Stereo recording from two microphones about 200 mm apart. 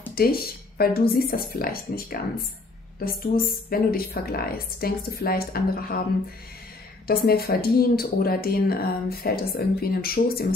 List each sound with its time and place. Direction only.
0.1 s speech: 50° left (ahead or behind)
7.1 s speech: 50° left (ahead or behind)